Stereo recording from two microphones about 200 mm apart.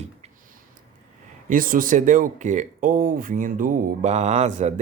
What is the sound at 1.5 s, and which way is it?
Speech, 45° right (ahead or behind).